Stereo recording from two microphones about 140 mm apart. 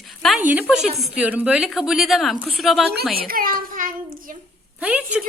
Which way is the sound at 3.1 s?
90° right.